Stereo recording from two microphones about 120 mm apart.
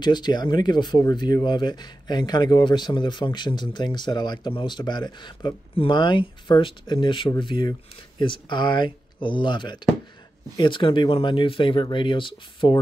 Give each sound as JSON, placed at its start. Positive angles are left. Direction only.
{"t": 0.0, "sound": "speech", "side_deg": 35}